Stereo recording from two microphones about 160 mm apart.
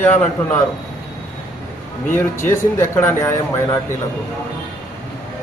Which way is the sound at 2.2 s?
15° left (ahead or behind).